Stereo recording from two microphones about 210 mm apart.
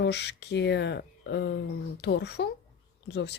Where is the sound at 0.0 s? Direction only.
55° left (ahead or behind).